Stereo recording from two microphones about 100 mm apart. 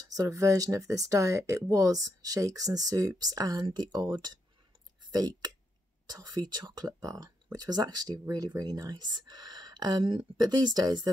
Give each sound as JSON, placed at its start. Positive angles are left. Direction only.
{"t": 0.0, "sound": "speech", "side_deg": -35}